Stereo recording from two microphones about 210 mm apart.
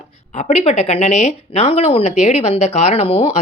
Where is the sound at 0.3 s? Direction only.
30° left (ahead or behind).